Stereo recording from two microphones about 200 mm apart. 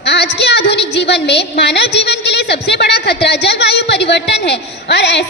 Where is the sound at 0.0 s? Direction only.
55° left (ahead or behind).